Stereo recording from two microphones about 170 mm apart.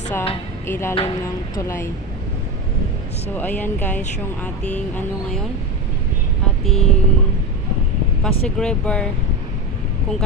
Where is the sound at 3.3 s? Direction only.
10° left (ahead or behind).